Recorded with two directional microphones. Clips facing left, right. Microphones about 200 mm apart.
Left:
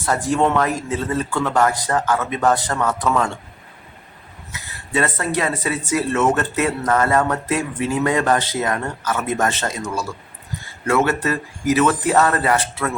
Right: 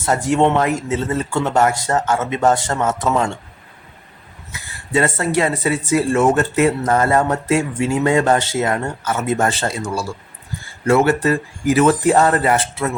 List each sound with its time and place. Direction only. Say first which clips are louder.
0.0 s speech: right 3 dB; 25° right (ahead or behind)
4.5 s speech: right 3 dB; 25° right (ahead or behind)